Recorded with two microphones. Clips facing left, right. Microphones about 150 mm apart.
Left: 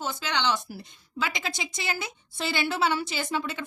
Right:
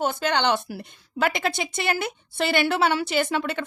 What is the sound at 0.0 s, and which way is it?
Speech, 55° right (ahead or behind).